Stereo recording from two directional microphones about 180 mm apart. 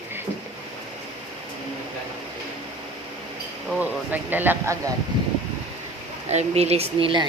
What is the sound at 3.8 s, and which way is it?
Speech, 10° right (ahead or behind).